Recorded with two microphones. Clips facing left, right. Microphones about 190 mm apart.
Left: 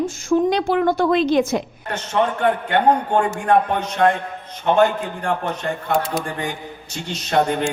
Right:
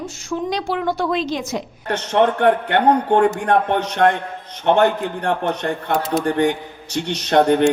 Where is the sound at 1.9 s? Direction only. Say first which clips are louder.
Right 4 dB; 70° right (ahead or behind).